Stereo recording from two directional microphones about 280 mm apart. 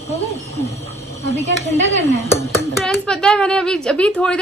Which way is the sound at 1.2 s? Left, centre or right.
Left.